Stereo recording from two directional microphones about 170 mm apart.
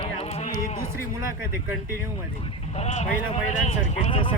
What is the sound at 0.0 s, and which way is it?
Music, 35° left (ahead or behind).